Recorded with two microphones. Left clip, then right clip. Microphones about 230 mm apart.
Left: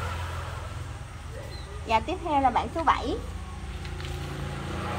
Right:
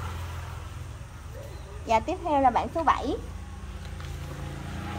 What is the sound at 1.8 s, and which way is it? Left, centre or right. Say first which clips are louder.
A woman's voice: right 1 dB; right.